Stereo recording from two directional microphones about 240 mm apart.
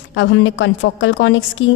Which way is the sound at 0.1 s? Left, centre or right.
Left.